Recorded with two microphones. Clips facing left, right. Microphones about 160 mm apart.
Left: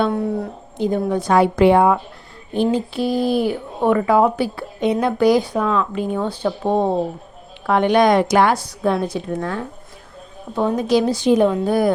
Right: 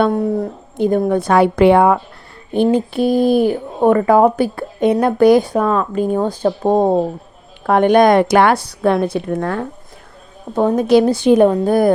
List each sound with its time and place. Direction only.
0.0 s a woman's voice: 40° right (ahead or behind)
0.8 s a woman's voice: 50° right (ahead or behind)
2.7 s a woman's voice: 50° right (ahead or behind)